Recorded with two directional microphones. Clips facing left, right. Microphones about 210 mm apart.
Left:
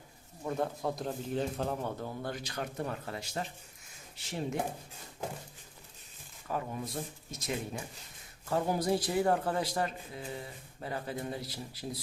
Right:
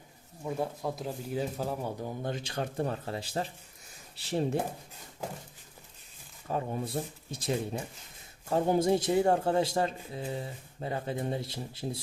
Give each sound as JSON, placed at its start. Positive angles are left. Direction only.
{"t": 0.4, "sound": "speech", "side_deg": -5}
{"t": 6.5, "sound": "a man's voice", "side_deg": -30}